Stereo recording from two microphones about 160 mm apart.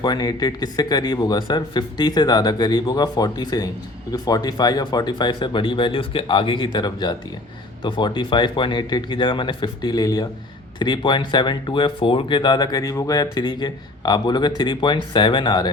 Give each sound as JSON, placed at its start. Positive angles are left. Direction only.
{"t": 0.0, "sound": "speech", "side_deg": 25}